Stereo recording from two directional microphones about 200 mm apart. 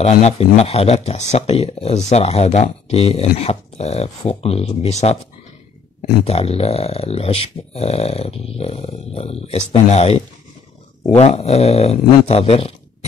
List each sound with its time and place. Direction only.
0.0 s speech: 30° left (ahead or behind)
6.2 s speech: 30° left (ahead or behind)